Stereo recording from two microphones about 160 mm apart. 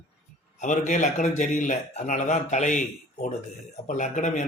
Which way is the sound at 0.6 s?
50° left (ahead or behind).